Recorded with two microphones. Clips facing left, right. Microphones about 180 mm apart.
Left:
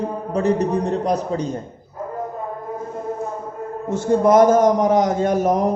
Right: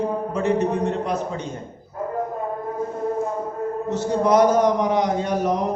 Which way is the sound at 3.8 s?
50° left (ahead or behind).